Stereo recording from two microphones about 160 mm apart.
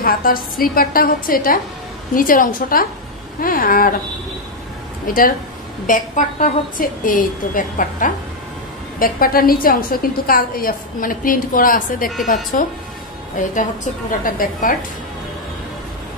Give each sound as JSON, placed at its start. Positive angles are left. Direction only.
{"t": 0.0, "sound": "a woman's voice", "side_deg": 65}
{"t": 5.0, "sound": "a woman's voice", "side_deg": 60}
{"t": 14.2, "sound": "a woman's voice", "side_deg": 60}